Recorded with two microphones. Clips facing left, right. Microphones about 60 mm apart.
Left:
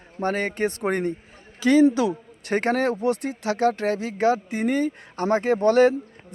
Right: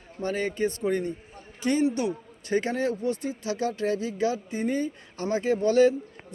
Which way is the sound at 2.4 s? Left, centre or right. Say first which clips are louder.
Left 4 dB; left.